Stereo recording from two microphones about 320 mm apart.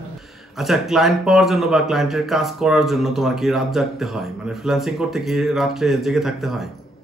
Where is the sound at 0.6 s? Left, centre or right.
Centre.